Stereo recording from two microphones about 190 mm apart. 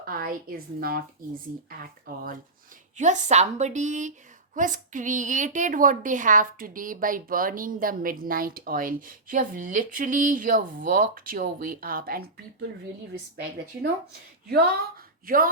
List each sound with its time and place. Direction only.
0.0 s a woman's voice: 50° right (ahead or behind)
3.0 s a woman's voice: 40° right (ahead or behind)
14.4 s a woman's voice: 55° right (ahead or behind)